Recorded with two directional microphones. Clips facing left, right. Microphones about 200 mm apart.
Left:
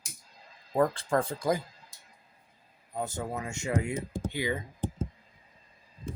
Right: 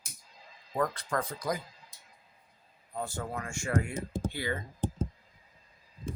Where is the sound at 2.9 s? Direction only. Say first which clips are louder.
Left 2 dB; 20° left (ahead or behind).